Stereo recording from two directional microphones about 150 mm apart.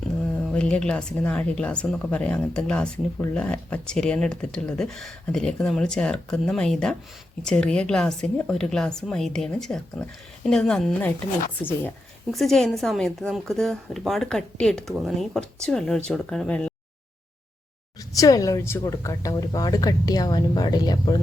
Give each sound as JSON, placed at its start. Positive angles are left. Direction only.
{"t": 0.4, "sound": "a woman's voice", "side_deg": 5}
{"t": 12.3, "sound": "speech", "side_deg": 0}
{"t": 18.1, "sound": "speech", "side_deg": 25}